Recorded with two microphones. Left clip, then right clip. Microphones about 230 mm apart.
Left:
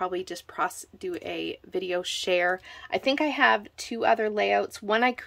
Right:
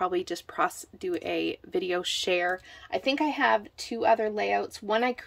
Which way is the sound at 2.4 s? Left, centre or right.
Centre.